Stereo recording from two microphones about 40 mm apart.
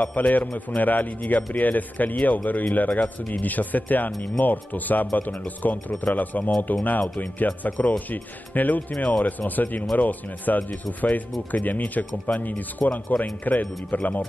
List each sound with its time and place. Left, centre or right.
0.0 s a man's voice: left